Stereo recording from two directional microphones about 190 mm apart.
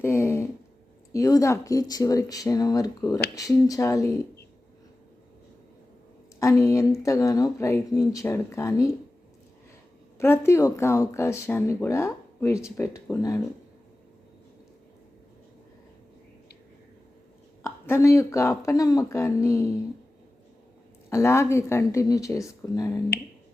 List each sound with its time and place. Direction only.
0.0 s speech: 10° left (ahead or behind)
6.4 s speech: 15° left (ahead or behind)
10.2 s speech: 10° left (ahead or behind)
17.6 s speech: 15° left (ahead or behind)
21.1 s speech: 15° left (ahead or behind)